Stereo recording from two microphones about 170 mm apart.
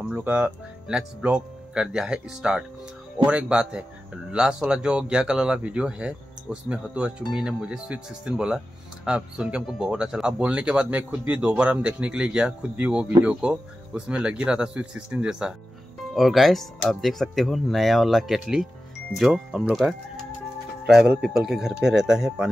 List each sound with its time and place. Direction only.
0.0 s speech: 5° right (ahead or behind)